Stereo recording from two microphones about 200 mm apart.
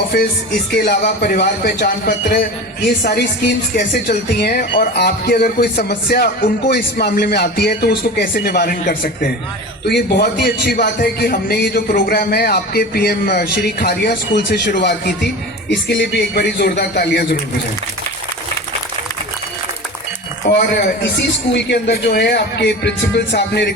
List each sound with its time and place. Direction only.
1.2 s speech: 50° left (ahead or behind)
20.6 s speech: 50° left (ahead or behind)